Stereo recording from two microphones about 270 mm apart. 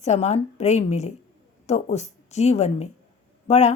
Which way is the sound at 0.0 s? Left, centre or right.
Left.